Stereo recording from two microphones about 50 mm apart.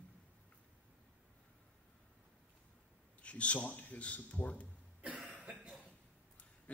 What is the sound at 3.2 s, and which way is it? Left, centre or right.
A man's voice, left.